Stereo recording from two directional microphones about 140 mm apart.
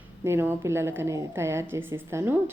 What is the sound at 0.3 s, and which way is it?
A woman's voice, 15° right (ahead or behind).